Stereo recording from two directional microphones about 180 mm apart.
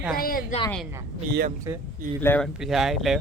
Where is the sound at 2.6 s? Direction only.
Centre (ahead or behind).